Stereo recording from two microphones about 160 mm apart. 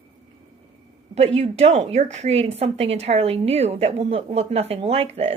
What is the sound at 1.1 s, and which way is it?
A woman's voice, 45° right (ahead or behind).